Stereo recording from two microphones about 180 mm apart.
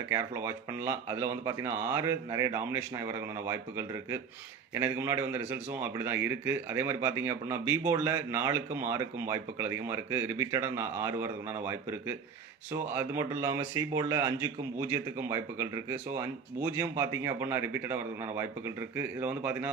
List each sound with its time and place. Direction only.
0.1 s a man's voice: 15° right (ahead or behind)